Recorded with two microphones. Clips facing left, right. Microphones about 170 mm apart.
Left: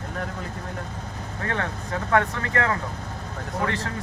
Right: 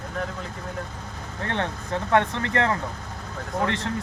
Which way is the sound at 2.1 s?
25° right (ahead or behind).